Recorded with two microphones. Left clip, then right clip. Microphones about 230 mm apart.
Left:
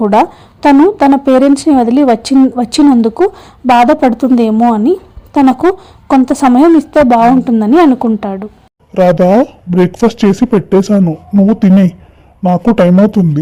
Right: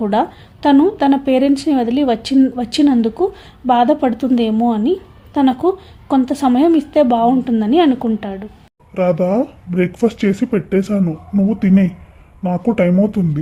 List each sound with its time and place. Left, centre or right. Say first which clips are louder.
0.0 s a woman's voice: left 8 dB; left
8.9 s speech: left 8 dB; left